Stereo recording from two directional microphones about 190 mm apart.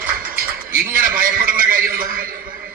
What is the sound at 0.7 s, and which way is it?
Speech, 45° right (ahead or behind).